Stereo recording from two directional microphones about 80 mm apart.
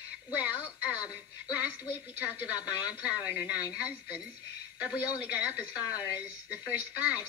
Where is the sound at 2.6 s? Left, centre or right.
Left.